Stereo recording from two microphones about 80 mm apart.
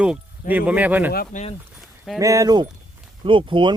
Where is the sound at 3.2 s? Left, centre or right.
Right.